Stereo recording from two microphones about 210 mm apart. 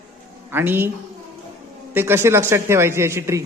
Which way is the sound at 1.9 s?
10° right (ahead or behind).